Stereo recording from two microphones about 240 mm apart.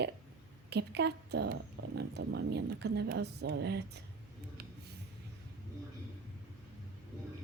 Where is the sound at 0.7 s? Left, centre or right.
Right.